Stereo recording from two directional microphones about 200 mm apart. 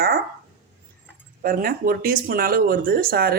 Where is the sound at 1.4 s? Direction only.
45° right (ahead or behind).